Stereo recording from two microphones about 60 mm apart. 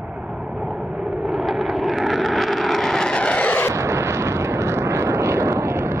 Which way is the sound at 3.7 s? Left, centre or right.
Right.